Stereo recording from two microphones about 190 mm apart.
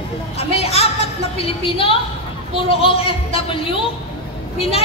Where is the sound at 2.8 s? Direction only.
30° left (ahead or behind).